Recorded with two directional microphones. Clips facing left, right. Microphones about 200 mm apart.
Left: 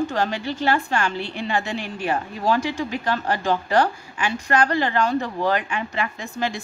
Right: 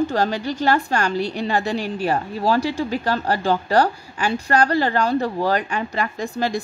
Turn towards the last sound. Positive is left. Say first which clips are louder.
# right 4 dB
turn(degrees=-40)  # may be behind; listen again after turning